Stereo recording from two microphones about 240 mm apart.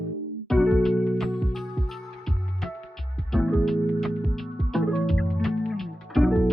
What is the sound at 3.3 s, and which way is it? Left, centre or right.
Music, centre.